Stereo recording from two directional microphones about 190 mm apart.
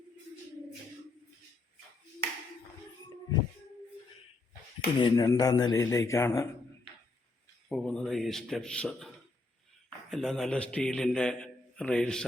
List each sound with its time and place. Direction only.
4.9 s a man's voice: 20° left (ahead or behind)
7.7 s a man's voice: 5° left (ahead or behind)